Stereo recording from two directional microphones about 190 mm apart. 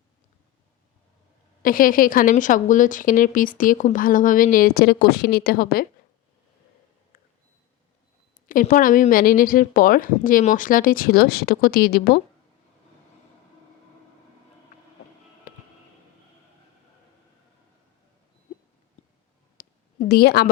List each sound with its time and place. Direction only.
1.6 s a woman's voice: 45° left (ahead or behind)
8.4 s a woman's voice: 45° left (ahead or behind)
19.5 s a sound: 55° left (ahead or behind)